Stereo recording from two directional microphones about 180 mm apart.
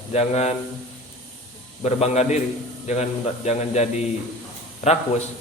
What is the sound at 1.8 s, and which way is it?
A man's voice, 35° left (ahead or behind).